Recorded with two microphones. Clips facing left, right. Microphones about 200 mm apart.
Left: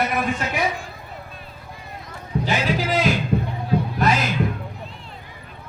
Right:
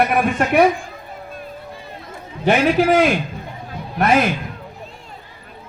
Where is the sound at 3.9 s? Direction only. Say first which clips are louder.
Right 9 dB; 60° right (ahead or behind).